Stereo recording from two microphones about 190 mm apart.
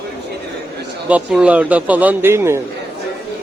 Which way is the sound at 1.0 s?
5° right (ahead or behind).